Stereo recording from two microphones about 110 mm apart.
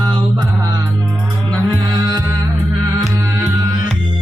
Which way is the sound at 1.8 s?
40° right (ahead or behind).